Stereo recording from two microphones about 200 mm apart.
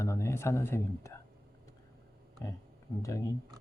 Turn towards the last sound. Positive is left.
turn(degrees=15)  # may be behind; listen again after turning